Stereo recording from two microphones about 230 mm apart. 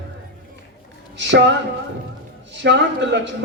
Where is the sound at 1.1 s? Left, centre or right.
Right.